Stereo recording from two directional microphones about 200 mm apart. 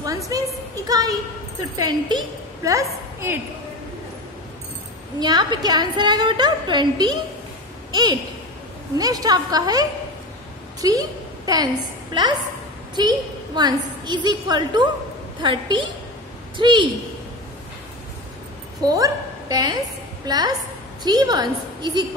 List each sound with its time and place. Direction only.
0.3 s a sound: 20° right (ahead or behind)
0.8 s a woman's voice: 20° right (ahead or behind)
5.2 s a woman's voice: 20° right (ahead or behind)
18.8 s a woman's voice: 20° right (ahead or behind)